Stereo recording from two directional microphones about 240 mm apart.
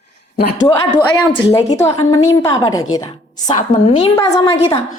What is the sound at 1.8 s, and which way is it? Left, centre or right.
A woman's voice, centre.